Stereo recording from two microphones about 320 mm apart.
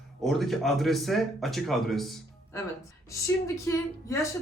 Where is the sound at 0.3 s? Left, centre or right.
Centre.